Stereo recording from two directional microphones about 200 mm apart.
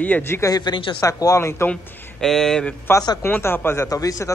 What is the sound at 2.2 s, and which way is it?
A man's voice, 5° left (ahead or behind).